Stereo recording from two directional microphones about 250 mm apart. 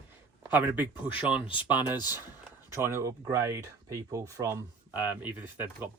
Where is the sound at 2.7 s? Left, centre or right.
Centre.